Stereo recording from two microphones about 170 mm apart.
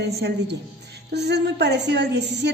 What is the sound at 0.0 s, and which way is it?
A woman's voice, 80° right.